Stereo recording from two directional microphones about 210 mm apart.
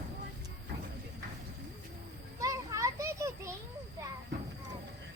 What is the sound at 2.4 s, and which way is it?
Children playing, 15° right (ahead or behind).